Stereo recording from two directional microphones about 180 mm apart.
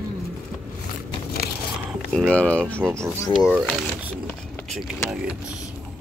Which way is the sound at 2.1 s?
5° left (ahead or behind).